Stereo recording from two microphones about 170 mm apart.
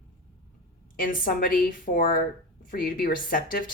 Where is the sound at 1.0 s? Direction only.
55° left (ahead or behind).